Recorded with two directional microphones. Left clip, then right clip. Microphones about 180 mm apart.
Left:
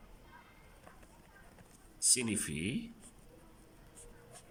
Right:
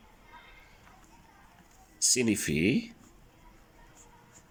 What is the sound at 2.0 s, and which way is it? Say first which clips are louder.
Speech: right 7 dB; 25° right (ahead or behind).